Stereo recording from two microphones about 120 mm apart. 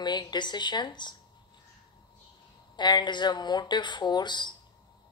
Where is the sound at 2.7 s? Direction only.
40° left (ahead or behind).